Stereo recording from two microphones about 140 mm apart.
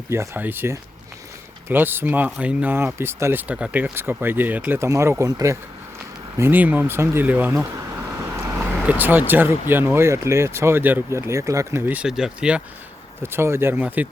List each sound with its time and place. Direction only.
0.1 s speech: 15° right (ahead or behind)
8.2 s vehicle: 20° right (ahead or behind)
8.7 s speech: 10° right (ahead or behind)
11.9 s speech: 5° right (ahead or behind)
13.2 s speech: 15° right (ahead or behind)